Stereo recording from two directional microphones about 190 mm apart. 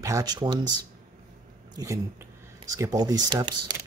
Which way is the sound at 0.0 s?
20° right (ahead or behind).